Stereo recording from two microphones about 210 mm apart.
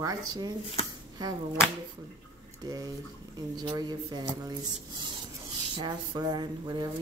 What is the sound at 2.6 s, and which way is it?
A woman's voice, 15° right (ahead or behind).